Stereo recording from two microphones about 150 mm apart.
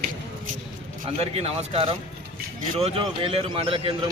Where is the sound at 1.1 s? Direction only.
40° right (ahead or behind).